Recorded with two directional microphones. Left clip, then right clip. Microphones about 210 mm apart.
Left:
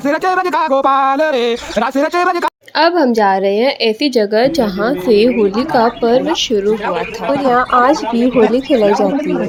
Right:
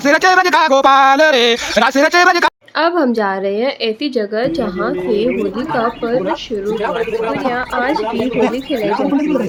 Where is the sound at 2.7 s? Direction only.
10° left (ahead or behind).